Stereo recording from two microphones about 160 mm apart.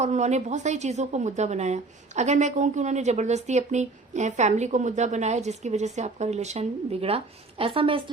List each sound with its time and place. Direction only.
0.0 s a woman's voice: 45° right (ahead or behind)